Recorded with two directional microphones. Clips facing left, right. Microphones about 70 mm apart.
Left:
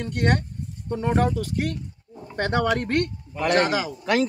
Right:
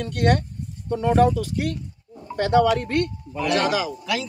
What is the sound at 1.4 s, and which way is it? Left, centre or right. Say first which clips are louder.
A man's voice: right 1 dB; left.